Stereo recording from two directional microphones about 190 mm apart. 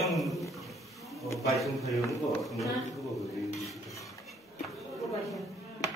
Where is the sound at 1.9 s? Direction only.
Centre (ahead or behind).